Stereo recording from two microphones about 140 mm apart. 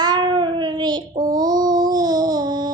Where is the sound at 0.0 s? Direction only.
30° right (ahead or behind).